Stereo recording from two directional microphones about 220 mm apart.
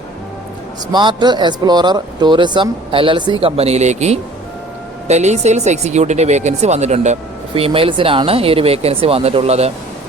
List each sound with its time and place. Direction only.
0.9 s speech: 20° right (ahead or behind)